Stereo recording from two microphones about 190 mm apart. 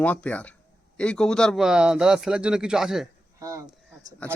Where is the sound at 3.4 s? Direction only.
15° right (ahead or behind).